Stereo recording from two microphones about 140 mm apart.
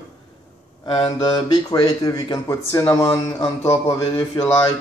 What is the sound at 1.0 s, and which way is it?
Speech, 40° left (ahead or behind).